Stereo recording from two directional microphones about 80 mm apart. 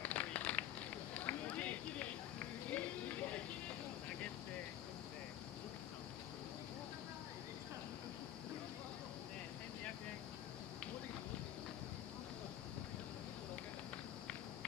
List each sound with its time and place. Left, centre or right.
0.0 s a sound: centre
1.1 s run: centre
2.7 s music: centre